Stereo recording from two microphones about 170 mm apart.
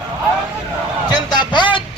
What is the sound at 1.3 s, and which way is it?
Music, 25° left (ahead or behind).